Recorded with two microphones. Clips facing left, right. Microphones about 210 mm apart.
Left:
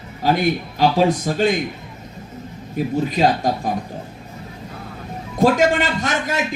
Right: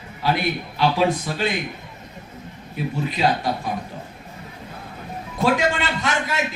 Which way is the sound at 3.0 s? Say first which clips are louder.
Left 2 dB; 45° left (ahead or behind).